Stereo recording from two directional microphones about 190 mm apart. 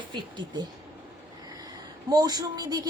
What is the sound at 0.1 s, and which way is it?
Speech, 25° right (ahead or behind).